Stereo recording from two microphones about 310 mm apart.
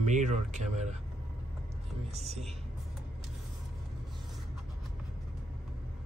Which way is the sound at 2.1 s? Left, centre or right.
Centre.